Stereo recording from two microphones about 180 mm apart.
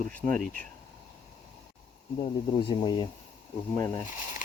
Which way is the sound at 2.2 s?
25° left (ahead or behind).